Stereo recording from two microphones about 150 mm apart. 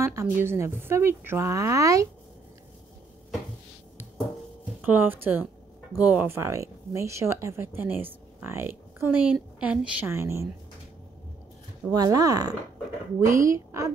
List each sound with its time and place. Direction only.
0.0 s speech: 20° right (ahead or behind)
4.8 s speech: 15° right (ahead or behind)
11.9 s a woman's voice: 25° right (ahead or behind)